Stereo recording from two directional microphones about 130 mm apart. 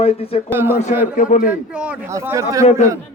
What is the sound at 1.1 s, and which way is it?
Speech, 85° left.